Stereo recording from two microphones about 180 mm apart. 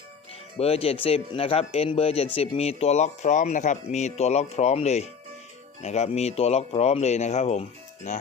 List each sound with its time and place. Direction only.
0.6 s speech: 35° left (ahead or behind)